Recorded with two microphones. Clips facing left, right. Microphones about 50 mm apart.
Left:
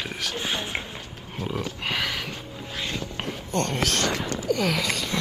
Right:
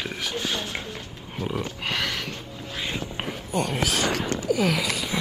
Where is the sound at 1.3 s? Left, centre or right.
Centre.